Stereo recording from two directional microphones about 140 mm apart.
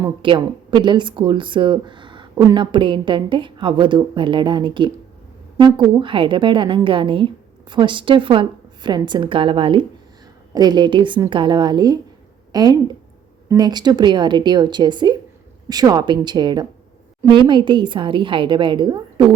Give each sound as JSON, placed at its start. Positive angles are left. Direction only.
{"t": 0.0, "sound": "a woman's voice", "side_deg": -35}